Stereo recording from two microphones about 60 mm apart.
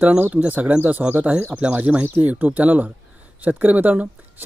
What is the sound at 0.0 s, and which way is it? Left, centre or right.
Speech, right.